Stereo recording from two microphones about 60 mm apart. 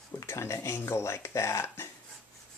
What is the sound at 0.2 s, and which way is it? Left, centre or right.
Speech, left.